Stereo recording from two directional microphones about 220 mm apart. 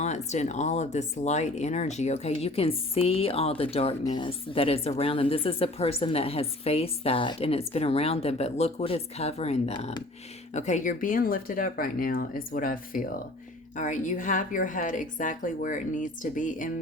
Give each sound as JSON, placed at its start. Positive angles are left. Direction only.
{"t": 0.0, "sound": "a woman's voice", "side_deg": 30}